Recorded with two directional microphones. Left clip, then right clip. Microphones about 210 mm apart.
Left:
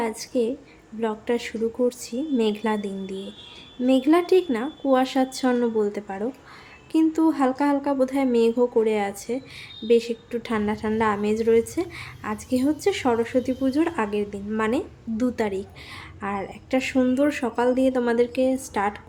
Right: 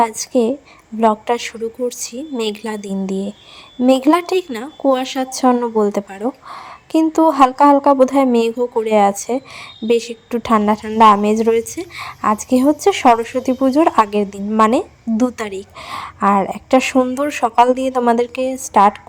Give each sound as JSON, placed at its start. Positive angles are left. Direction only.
{"t": 0.0, "sound": "a woman's voice", "side_deg": -35}